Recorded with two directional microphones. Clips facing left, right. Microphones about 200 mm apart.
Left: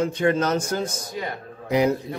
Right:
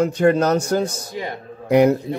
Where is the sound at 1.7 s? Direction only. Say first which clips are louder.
Right 6 dB; 60° right (ahead or behind).